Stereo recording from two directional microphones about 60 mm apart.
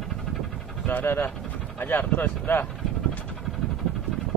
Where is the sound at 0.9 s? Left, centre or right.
Left.